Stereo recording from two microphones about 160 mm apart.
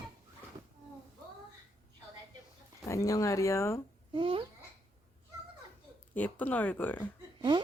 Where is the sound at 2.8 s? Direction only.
20° left (ahead or behind).